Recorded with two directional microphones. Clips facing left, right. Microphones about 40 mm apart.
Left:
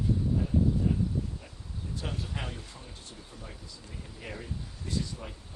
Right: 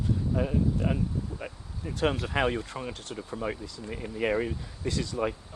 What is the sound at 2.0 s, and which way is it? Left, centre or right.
Speech, right.